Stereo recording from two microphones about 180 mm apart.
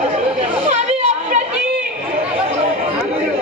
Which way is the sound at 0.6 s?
40° right (ahead or behind).